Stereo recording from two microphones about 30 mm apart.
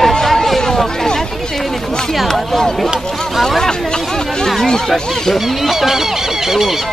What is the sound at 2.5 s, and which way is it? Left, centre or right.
Speech, centre.